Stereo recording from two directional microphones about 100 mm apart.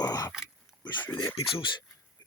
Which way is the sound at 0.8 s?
50° left (ahead or behind).